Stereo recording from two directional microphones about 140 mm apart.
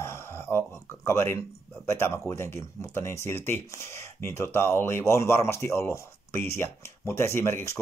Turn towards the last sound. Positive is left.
turn(degrees=20)  # may be behind; listen again after turning